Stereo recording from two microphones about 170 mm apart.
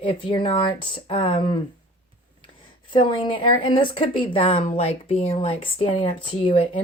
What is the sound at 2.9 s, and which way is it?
Speech, 30° left (ahead or behind).